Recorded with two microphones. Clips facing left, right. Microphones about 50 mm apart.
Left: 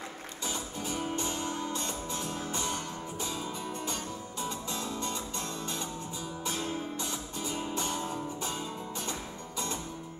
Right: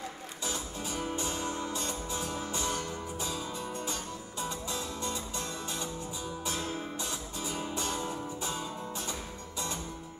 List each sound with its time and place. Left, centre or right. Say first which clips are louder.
0.5 s music: left 1 dB; centre
2.5 s music: right 1 dB; left
3.2 s music: left 2 dB; centre
7.8 s music: right 1 dB; centre